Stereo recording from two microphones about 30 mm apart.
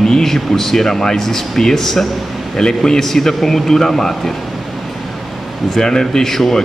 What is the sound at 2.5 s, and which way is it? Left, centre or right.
Speech, left.